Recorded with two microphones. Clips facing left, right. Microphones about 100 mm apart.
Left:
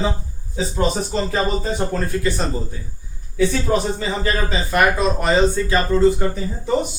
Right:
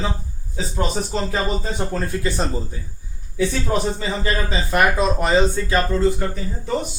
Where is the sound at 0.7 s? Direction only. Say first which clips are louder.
Left 2 dB; 5° left (ahead or behind).